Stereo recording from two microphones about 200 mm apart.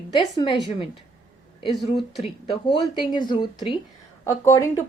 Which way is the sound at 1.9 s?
Centre (ahead or behind).